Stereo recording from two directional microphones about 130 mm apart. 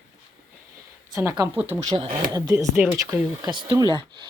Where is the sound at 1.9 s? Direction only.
30° right (ahead or behind).